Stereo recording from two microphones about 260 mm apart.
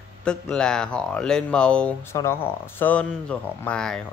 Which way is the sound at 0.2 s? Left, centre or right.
Centre.